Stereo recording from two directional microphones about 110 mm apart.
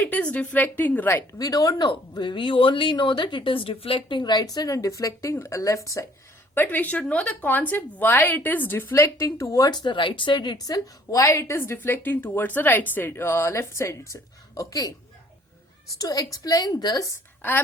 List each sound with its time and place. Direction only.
0.0 s a woman's voice: 15° left (ahead or behind)
6.5 s a woman's voice: 15° left (ahead or behind); by 14.9 s 30° left (ahead or behind)
16.0 s a woman's voice: 35° left (ahead or behind)